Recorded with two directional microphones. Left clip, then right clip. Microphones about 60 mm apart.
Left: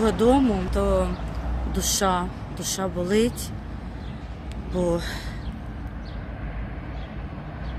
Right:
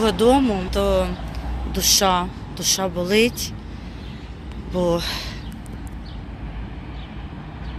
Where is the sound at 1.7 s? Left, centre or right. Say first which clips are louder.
Right 8 dB; left.